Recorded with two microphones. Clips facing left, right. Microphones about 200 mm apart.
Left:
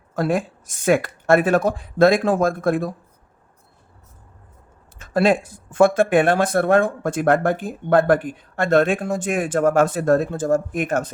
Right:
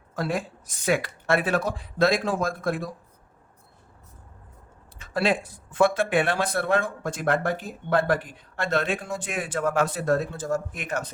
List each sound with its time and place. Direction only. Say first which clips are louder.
0.2 s speech: left 7 dB; 50° left (ahead or behind)
4.9 s speech: left 7 dB; 45° left (ahead or behind)